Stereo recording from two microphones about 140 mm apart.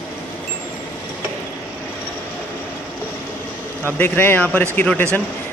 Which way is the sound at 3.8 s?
15° left (ahead or behind).